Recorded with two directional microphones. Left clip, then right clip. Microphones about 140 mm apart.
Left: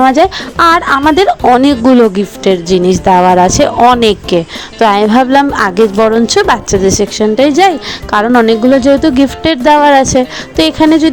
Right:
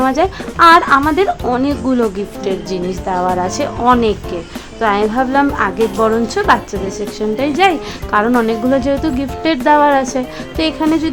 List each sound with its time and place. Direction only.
0.0 s speech: 45° left (ahead or behind); by 7.3 s 80° left
7.3 s speech: 55° left (ahead or behind)
8.3 s speech: 45° left (ahead or behind)
9.4 s speech: 55° left (ahead or behind)